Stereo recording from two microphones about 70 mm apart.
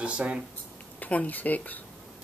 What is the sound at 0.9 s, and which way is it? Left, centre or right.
Speech, left.